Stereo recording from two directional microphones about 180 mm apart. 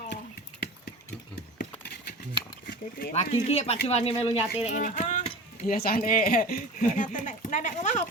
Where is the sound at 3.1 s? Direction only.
35° left (ahead or behind).